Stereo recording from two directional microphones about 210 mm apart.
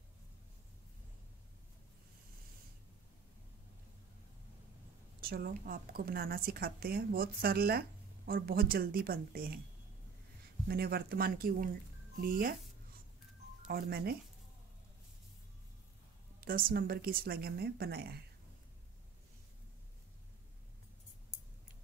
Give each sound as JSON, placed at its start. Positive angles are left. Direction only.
{"t": 5.2, "sound": "a woman's voice", "side_deg": -45}
{"t": 10.7, "sound": "a woman's voice", "side_deg": -45}
{"t": 13.7, "sound": "a woman's voice", "side_deg": -45}
{"t": 16.3, "sound": "a woman's voice", "side_deg": -45}